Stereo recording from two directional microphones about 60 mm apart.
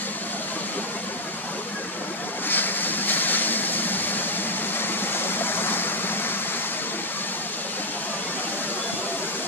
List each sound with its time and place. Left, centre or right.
2.4 s vehicle: left
5.1 s stream: left